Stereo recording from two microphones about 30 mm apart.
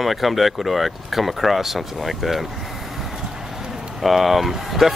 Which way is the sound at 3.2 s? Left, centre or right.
Centre.